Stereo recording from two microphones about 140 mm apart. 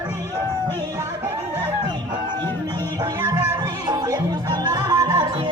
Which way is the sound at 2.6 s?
30° right (ahead or behind).